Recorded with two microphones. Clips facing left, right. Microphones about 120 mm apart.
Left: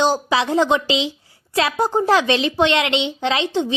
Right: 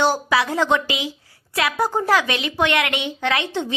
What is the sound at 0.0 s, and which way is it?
A woman's voice, 20° left (ahead or behind).